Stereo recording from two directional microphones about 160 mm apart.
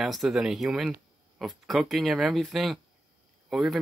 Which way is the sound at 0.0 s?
Centre (ahead or behind).